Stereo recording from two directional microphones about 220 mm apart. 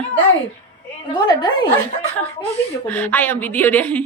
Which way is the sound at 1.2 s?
20° left (ahead or behind).